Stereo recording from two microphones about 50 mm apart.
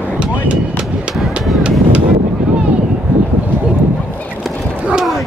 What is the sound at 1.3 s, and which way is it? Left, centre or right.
Run, right.